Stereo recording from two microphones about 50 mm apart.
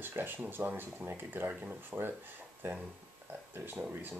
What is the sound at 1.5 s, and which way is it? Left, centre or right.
Speech, right.